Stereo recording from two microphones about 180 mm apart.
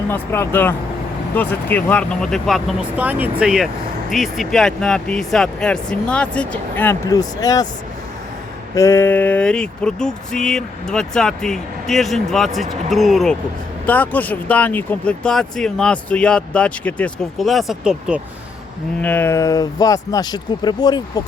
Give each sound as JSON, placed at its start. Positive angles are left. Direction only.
{"t": 0.1, "sound": "speech", "side_deg": 10}
{"t": 8.7, "sound": "speech", "side_deg": 15}
{"t": 19.0, "sound": "speech", "side_deg": 10}